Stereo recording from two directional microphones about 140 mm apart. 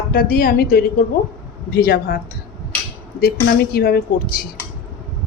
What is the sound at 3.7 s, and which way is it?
Speech, 90° left.